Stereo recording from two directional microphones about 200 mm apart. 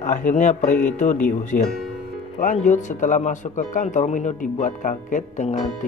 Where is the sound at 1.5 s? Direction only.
50° left (ahead or behind).